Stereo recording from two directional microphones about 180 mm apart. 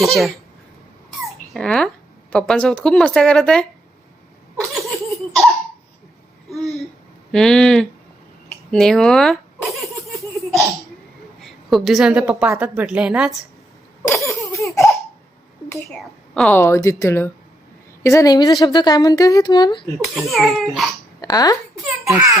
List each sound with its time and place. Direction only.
0.0 s a woman's voice: centre (ahead or behind)
1.5 s a woman's voice: 5° left (ahead or behind)
6.5 s a sound: centre (ahead or behind)
7.3 s a woman's voice: 5° left (ahead or behind)
10.1 s laughter: centre (ahead or behind)
11.3 s a woman's voice: centre (ahead or behind)
14.1 s laughter: 15° left (ahead or behind)
15.9 s a woman's voice: centre (ahead or behind); by 19.8 s 25° left (ahead or behind)
19.8 s a woman's voice: centre (ahead or behind)
21.2 s speech: 20° left (ahead or behind)
21.8 s a child's voice: 15° right (ahead or behind)